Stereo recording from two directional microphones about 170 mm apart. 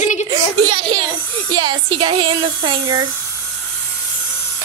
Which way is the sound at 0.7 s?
30° right (ahead or behind).